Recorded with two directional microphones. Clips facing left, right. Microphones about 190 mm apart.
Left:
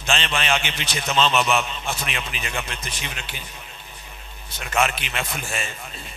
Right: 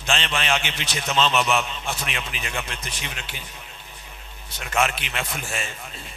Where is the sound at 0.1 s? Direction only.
15° left (ahead or behind).